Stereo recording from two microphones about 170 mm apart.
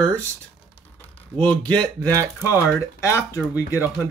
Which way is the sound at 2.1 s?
20° right (ahead or behind).